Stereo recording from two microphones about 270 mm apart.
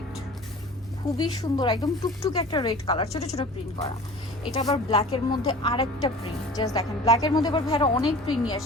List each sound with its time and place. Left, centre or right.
1.2 s speech: centre
4.5 s speech: centre